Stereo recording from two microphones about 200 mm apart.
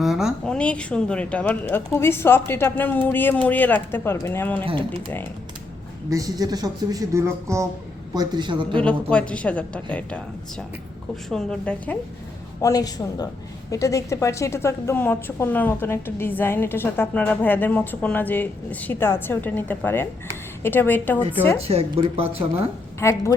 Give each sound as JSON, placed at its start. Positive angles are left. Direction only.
{"t": 0.0, "sound": "a woman's voice", "side_deg": 0}
{"t": 4.6, "sound": "a woman's voice", "side_deg": -25}
{"t": 6.1, "sound": "a woman's voice", "side_deg": -15}
{"t": 8.8, "sound": "a woman's voice", "side_deg": 5}
{"t": 11.3, "sound": "a woman's voice", "side_deg": 5}
{"t": 12.6, "sound": "a woman's voice", "side_deg": 20}
{"t": 21.6, "sound": "a woman's voice", "side_deg": -30}
{"t": 23.0, "sound": "a woman's voice", "side_deg": 15}